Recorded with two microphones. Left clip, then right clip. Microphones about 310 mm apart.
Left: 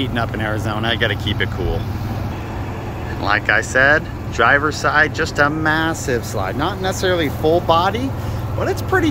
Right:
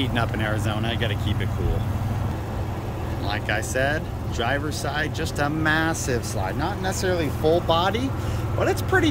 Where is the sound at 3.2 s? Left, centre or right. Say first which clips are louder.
Left 11 dB; centre.